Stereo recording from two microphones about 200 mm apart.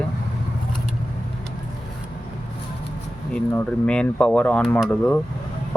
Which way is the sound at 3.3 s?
5° left (ahead or behind).